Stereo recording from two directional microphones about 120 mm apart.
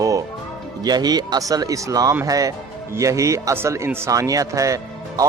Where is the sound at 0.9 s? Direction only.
35° right (ahead or behind).